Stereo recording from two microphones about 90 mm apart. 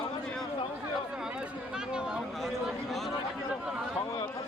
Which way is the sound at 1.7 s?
10° right (ahead or behind).